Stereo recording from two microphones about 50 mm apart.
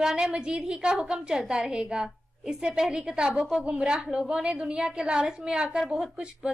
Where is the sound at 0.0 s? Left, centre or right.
Centre.